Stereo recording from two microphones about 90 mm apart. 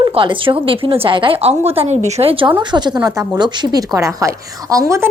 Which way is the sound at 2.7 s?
55° right (ahead or behind).